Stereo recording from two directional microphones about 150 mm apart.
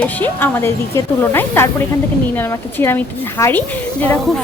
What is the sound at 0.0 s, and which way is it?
Speech, 10° left (ahead or behind).